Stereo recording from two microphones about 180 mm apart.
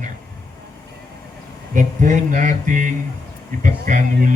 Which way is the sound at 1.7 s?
45° right (ahead or behind).